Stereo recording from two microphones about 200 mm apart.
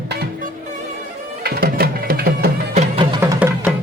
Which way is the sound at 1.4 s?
50° right (ahead or behind).